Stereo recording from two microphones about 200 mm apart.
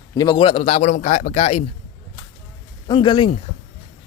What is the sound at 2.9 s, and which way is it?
Speech, 25° left (ahead or behind).